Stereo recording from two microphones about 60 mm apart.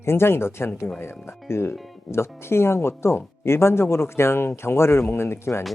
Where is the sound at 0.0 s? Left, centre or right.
Left.